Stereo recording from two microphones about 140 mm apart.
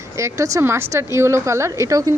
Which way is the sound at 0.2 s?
20° right (ahead or behind).